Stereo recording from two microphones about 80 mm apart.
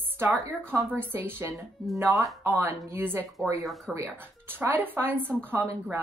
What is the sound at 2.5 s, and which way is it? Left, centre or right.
Speech, right.